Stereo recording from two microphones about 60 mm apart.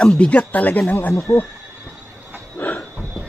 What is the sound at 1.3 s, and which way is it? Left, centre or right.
Speech, left.